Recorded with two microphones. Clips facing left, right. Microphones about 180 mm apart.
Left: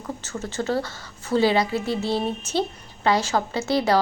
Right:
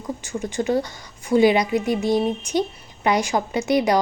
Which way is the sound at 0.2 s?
15° right (ahead or behind).